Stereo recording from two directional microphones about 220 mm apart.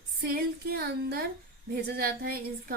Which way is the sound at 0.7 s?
45° right (ahead or behind).